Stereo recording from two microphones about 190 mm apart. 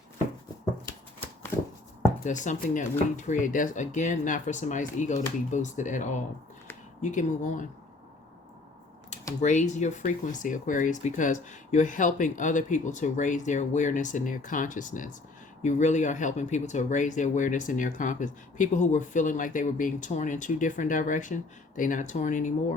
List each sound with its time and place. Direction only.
2.2 s speech: 40° left (ahead or behind)
9.4 s speech: 40° left (ahead or behind)